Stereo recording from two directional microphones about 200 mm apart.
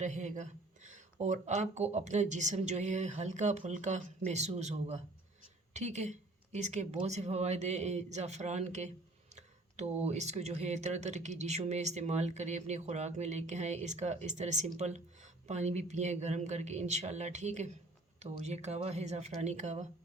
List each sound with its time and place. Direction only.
0.0 s speech: 35° right (ahead or behind)